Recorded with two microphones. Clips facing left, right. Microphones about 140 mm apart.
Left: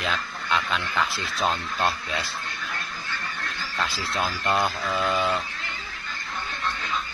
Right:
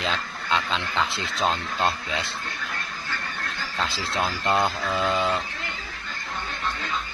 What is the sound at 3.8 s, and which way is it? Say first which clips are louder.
Speech: right 1 dB; 25° right (ahead or behind).